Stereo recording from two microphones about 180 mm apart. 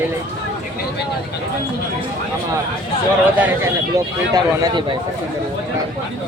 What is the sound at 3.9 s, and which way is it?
Speech, 20° right (ahead or behind).